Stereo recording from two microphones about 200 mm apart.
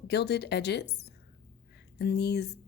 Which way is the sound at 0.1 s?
55° left (ahead or behind).